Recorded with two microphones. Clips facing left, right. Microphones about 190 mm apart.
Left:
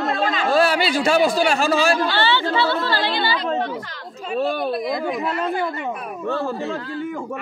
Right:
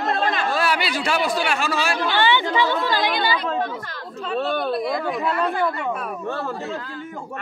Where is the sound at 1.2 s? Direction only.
40° left (ahead or behind).